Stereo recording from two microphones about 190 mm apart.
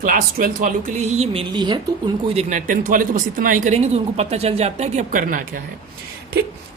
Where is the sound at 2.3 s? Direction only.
40° right (ahead or behind).